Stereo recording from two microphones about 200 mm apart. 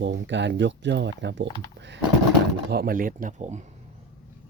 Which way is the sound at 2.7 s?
50° right (ahead or behind).